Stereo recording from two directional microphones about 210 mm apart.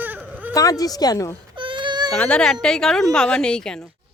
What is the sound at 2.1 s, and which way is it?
Speech, 5° left (ahead or behind).